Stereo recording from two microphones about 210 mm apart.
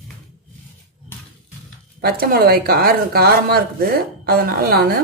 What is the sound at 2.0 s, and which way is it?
A woman's voice, 45° right (ahead or behind).